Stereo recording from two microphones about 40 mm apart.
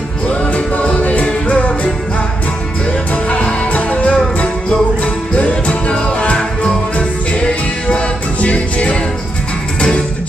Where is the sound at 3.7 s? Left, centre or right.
Left.